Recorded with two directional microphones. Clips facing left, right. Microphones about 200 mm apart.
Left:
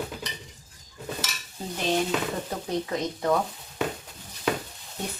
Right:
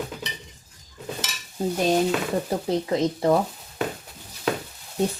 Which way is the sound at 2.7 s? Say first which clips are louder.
Right 5 dB; 30° right (ahead or behind).